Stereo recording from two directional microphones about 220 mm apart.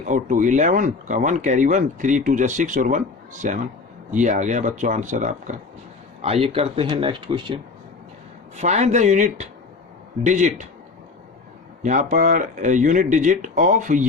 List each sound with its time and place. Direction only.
0.0 s speech: 35° right (ahead or behind)
8.5 s speech: 30° right (ahead or behind)
11.8 s speech: 35° right (ahead or behind)